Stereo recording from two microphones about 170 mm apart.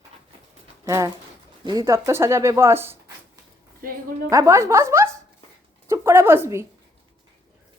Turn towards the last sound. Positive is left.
turn(degrees=-15)  # may be behind; listen again after turning